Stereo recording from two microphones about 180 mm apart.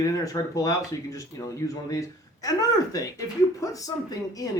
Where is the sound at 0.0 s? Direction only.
20° left (ahead or behind).